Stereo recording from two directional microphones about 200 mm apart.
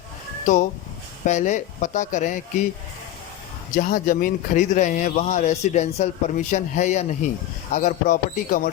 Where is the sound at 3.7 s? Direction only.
40° left (ahead or behind).